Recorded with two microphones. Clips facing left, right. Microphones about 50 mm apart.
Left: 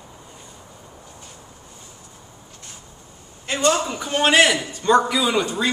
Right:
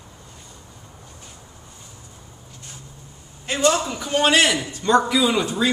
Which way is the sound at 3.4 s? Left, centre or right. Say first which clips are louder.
Even; centre.